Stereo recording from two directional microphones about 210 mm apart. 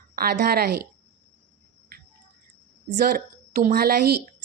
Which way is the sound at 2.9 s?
40° right (ahead or behind).